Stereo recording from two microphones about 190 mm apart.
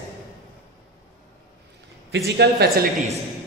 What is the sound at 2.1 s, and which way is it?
Speech, 60° right (ahead or behind).